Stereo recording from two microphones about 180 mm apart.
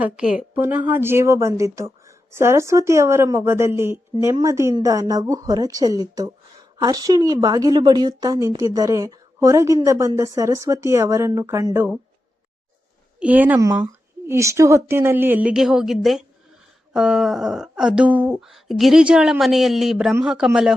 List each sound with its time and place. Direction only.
0.0 s a woman's voice: 5° right (ahead or behind)
13.1 s a woman's voice: 10° right (ahead or behind)